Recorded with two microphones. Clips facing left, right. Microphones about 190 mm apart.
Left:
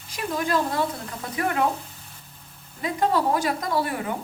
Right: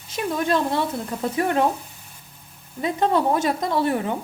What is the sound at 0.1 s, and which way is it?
Speech, 25° right (ahead or behind).